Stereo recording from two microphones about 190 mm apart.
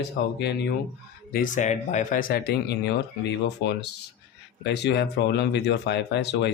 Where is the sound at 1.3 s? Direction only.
45° left (ahead or behind); by 6.5 s 65° left (ahead or behind).